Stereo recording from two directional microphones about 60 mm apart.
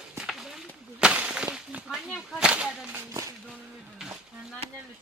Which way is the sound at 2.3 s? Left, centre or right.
Centre.